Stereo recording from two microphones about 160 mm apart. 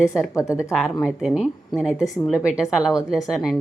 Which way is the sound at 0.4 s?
5° right (ahead or behind).